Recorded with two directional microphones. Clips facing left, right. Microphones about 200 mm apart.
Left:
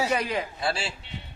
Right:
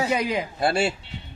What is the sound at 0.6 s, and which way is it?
Speech, 55° right (ahead or behind).